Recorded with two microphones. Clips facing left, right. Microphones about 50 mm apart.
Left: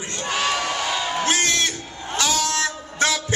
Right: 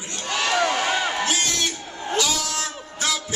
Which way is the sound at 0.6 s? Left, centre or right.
Right.